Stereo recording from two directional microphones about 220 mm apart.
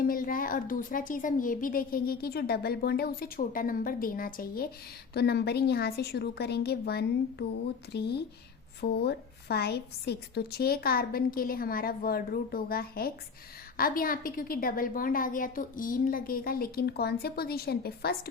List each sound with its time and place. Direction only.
0.0 s a woman's voice: 40° left (ahead or behind)